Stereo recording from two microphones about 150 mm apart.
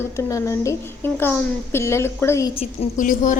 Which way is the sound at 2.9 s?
60° left (ahead or behind).